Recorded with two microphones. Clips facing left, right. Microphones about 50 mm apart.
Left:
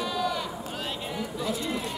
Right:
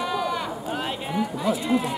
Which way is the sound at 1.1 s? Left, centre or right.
Centre.